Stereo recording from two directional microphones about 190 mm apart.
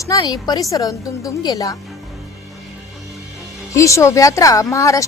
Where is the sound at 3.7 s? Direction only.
15° left (ahead or behind).